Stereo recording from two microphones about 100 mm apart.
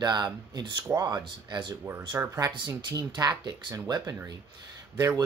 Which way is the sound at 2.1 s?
25° right (ahead or behind).